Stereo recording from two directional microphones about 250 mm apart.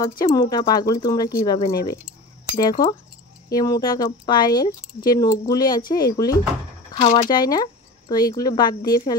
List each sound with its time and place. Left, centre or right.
0.2 s speech: centre